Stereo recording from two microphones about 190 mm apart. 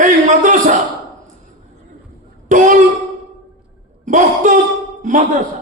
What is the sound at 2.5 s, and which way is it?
Speech, 40° right (ahead or behind).